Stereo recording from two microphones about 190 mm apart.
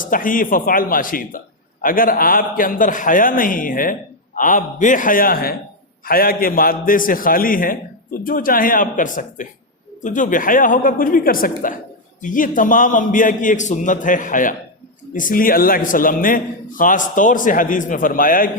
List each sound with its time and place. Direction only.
0.0 s a man's voice: 45° left (ahead or behind)